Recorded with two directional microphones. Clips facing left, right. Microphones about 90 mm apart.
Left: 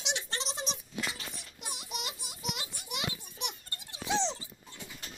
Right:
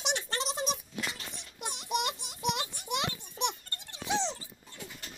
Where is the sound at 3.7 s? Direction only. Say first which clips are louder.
Even; 10° left (ahead or behind).